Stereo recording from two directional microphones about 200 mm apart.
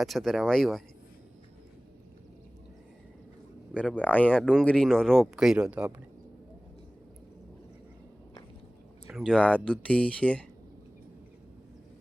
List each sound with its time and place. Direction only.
0.0 s speech: centre (ahead or behind)
3.8 s speech: 5° left (ahead or behind)
9.0 s speech: centre (ahead or behind)